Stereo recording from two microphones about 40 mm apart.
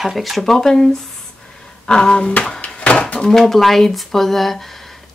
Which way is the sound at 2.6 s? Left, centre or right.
Left.